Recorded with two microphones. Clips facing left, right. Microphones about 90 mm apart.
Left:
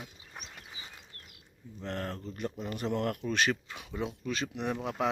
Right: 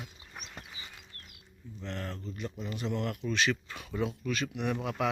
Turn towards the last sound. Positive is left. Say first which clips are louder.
# even
turn(degrees=30)  # may be behind; listen again after turning